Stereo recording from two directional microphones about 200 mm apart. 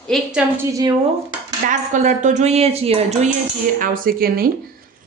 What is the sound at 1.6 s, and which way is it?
Speech, 40° right (ahead or behind).